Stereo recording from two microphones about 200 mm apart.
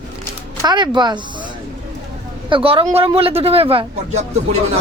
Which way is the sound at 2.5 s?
25° right (ahead or behind).